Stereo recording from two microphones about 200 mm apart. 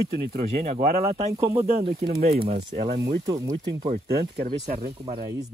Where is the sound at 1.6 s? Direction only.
30° right (ahead or behind).